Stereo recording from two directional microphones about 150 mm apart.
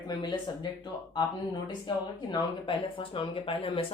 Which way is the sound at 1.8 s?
30° left (ahead or behind).